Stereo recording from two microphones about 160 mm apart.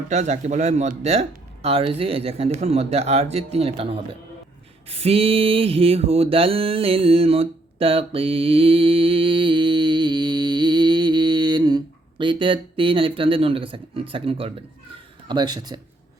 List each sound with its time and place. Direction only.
0.1 s speech: 45° right (ahead or behind)
4.9 s mantra: 35° right (ahead or behind)
15.3 s speech: 25° right (ahead or behind)